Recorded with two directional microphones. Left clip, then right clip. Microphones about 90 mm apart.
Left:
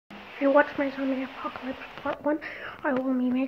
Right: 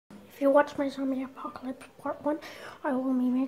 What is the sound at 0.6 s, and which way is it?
Speech, 45° right (ahead or behind).